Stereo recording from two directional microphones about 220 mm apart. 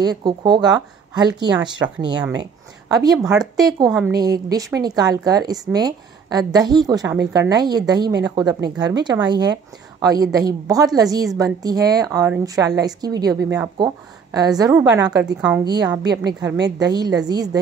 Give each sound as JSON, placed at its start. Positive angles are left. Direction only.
{"t": 0.0, "sound": "speech", "side_deg": -20}
{"t": 3.2, "sound": "speech", "side_deg": -5}
{"t": 3.5, "sound": "speech", "side_deg": -15}